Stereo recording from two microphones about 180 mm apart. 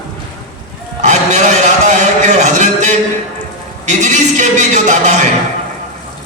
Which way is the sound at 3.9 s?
40° right (ahead or behind).